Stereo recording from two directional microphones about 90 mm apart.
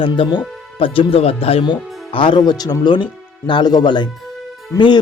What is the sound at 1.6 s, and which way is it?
Speech, 65° left (ahead or behind).